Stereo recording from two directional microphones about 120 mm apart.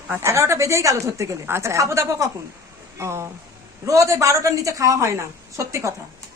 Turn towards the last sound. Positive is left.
turn(degrees=-25)  # may be behind; listen again after turning